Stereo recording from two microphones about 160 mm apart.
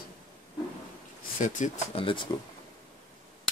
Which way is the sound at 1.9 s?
30° left (ahead or behind).